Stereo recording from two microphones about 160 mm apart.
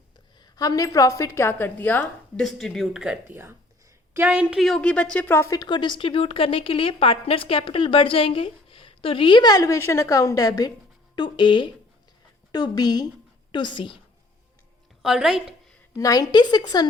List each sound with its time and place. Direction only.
0.4 s a woman's voice: 25° left (ahead or behind); by 4.4 s 10° right (ahead or behind)
4.4 s a woman's voice: centre (ahead or behind); by 14.0 s 30° left (ahead or behind)
15.0 s a sound: 5° right (ahead or behind)
16.0 s a woman's voice: 20° left (ahead or behind)